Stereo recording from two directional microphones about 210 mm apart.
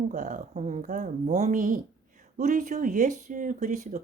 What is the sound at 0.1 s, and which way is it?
Speech, 35° right (ahead or behind).